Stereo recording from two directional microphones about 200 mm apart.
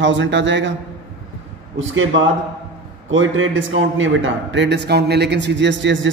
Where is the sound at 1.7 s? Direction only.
75° right (ahead or behind).